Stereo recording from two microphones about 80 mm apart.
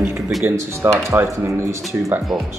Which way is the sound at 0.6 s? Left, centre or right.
Right.